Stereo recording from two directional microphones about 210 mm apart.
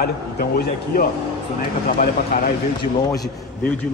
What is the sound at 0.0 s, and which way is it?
Speech, 50° left (ahead or behind).